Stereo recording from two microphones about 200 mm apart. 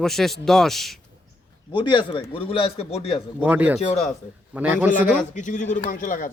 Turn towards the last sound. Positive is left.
turn(degrees=40)  # may be behind; listen again after turning